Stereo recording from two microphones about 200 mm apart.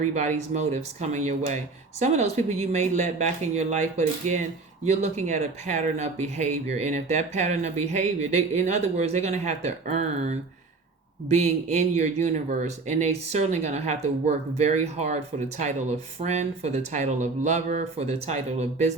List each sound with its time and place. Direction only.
0.1 s speech: 35° right (ahead or behind)